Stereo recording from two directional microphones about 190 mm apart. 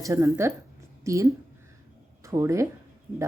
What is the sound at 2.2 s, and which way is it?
Speech, 15° right (ahead or behind).